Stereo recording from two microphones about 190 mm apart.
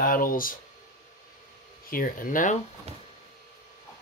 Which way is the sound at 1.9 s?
45° left (ahead or behind).